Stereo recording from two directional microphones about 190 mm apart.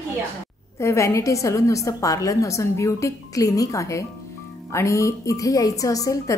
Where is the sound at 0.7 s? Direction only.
15° left (ahead or behind).